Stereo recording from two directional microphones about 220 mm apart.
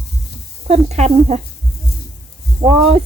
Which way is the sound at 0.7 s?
30° right (ahead or behind).